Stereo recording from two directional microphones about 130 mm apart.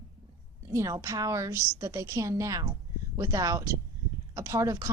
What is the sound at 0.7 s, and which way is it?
A woman's voice, 25° right (ahead or behind).